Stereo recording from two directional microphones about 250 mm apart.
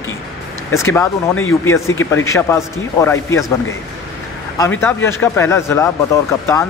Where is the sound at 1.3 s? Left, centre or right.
Left.